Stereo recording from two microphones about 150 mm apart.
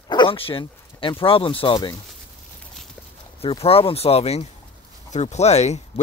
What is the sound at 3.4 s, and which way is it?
Speech, 40° left (ahead or behind).